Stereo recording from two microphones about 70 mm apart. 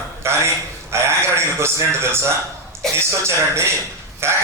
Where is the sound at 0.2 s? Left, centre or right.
Right.